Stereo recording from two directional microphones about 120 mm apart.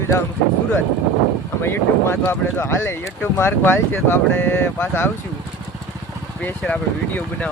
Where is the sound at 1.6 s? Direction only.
20° left (ahead or behind).